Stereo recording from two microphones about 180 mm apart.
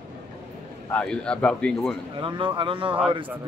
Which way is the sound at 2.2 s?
30° right (ahead or behind).